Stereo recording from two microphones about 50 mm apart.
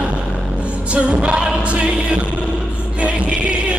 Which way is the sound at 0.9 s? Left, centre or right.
Right.